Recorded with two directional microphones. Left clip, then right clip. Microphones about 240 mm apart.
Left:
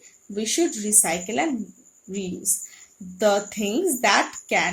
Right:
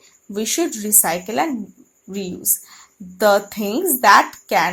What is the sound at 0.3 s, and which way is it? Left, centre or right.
A woman's voice, right.